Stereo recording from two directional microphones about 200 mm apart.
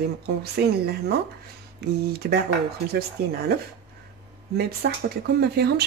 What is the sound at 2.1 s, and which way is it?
Speech, 50° right (ahead or behind).